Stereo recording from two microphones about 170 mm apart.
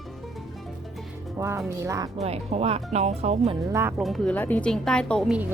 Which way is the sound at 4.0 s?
5° left (ahead or behind).